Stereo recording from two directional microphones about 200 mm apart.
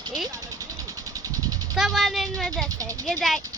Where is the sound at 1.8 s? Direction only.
Centre (ahead or behind).